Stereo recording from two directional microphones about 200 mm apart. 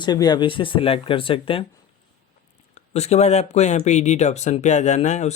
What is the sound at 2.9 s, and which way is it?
Speech, 35° left (ahead or behind).